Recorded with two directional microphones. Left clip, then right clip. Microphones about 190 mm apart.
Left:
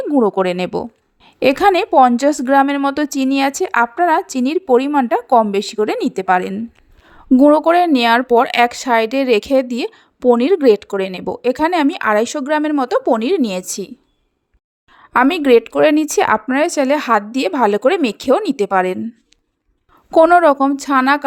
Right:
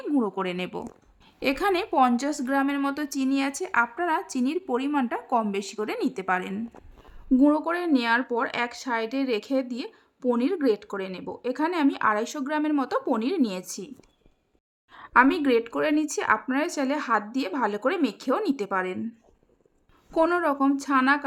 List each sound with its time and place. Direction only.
0.0 s speech: 35° left (ahead or behind)
15.1 s speech: 40° left (ahead or behind)
20.1 s speech: 35° left (ahead or behind)